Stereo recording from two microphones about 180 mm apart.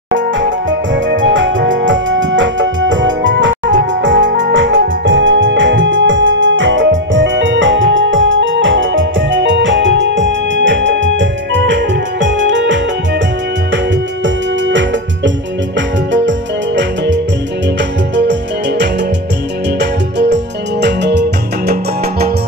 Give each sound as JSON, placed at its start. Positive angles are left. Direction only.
{"t": 0.1, "sound": "music", "side_deg": -90}
{"t": 14.2, "sound": "music", "side_deg": -90}